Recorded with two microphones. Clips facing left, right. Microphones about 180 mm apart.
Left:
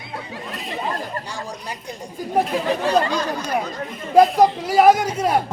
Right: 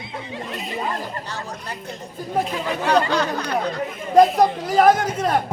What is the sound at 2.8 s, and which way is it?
Speech, 70° right (ahead or behind).